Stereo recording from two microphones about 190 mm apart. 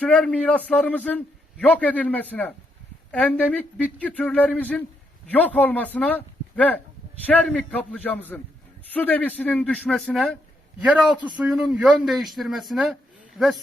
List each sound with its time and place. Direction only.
0.0 s a man's voice: 5° left (ahead or behind)
10.8 s a man's voice: 5° right (ahead or behind)